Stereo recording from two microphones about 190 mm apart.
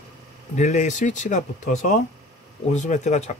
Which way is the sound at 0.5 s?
40° left (ahead or behind).